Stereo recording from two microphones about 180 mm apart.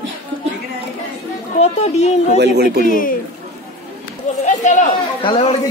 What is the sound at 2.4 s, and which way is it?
Speech, 65° right (ahead or behind).